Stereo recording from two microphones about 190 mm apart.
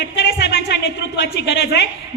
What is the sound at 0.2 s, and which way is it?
A woman's voice, 65° left (ahead or behind).